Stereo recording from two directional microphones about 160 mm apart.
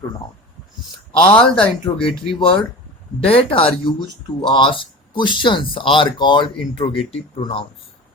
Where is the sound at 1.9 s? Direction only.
25° left (ahead or behind).